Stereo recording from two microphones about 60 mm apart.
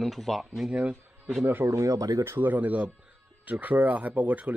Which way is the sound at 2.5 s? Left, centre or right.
Right.